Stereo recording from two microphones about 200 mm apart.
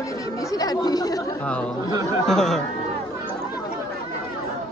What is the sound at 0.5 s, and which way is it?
Speech, 20° left (ahead or behind).